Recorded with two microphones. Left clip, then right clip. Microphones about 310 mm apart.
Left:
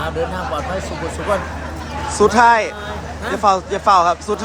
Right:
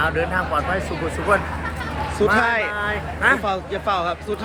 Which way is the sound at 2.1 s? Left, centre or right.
Centre.